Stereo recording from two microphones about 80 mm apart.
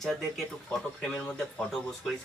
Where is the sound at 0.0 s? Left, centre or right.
Centre.